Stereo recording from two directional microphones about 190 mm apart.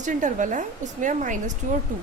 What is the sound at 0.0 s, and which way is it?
A woman's voice, 40° right (ahead or behind).